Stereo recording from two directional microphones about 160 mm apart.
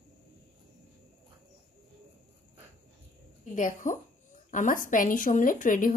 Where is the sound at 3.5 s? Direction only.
55° left (ahead or behind).